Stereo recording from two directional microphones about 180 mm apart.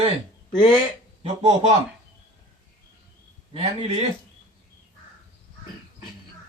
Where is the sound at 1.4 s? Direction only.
40° right (ahead or behind).